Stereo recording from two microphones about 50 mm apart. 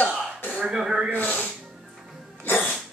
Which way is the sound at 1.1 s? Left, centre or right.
Left.